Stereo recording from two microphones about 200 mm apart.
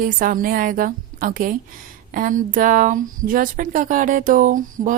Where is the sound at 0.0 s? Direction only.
45° right (ahead or behind).